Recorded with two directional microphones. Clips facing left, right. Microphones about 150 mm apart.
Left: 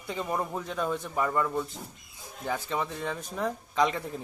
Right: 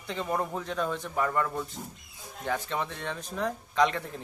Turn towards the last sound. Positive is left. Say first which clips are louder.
# right 1 dB
turn(degrees=5)  # may be behind; listen again after turning